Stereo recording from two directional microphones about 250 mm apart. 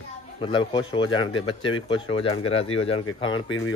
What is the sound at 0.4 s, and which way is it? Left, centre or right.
Speech, centre.